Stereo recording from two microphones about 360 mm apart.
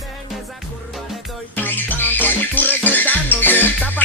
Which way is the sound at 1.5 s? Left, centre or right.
Centre.